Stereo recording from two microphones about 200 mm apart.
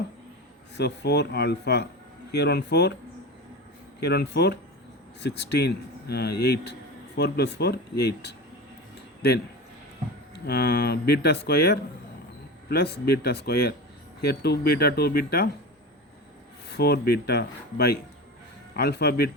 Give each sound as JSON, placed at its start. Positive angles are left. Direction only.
{"t": 0.8, "sound": "speech", "side_deg": 55}
{"t": 4.0, "sound": "speech", "side_deg": 55}
{"t": 10.4, "sound": "speech", "side_deg": 55}
{"t": 16.6, "sound": "speech", "side_deg": 55}